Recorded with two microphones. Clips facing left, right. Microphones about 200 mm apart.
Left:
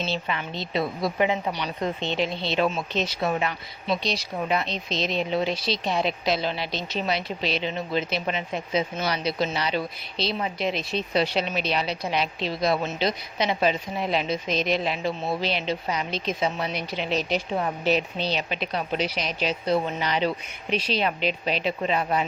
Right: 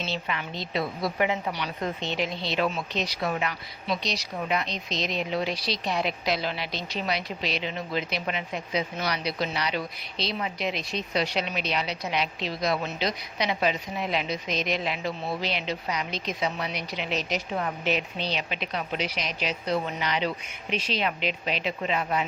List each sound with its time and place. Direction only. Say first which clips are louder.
0.0 s a woman's voice: left 3 dB; 30° left (ahead or behind)